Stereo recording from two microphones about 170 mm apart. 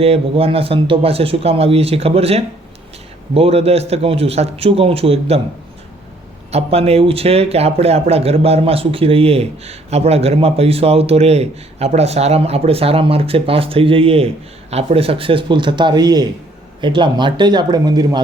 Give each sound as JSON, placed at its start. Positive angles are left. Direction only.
{"t": 0.0, "sound": "speech", "side_deg": -35}
{"t": 6.5, "sound": "speech", "side_deg": -35}